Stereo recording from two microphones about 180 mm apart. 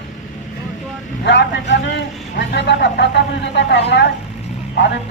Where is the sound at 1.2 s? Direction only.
75° left (ahead or behind).